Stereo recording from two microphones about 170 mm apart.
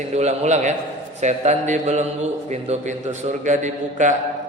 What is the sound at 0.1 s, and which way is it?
A man's voice, 40° right (ahead or behind).